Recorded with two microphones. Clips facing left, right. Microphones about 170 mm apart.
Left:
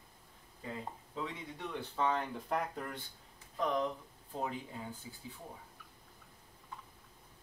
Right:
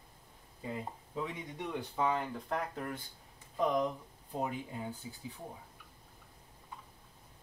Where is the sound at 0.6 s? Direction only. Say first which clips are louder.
Right 3 dB; 15° right (ahead or behind).